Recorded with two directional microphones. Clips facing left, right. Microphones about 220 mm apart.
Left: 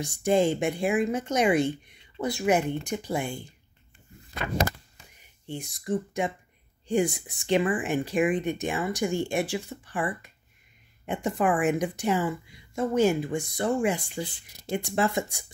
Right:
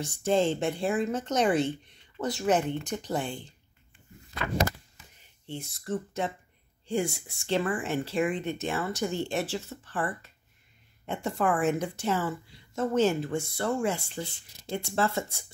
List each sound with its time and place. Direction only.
0.0 s speech: 15° left (ahead or behind)
5.2 s speech: 15° left (ahead or behind)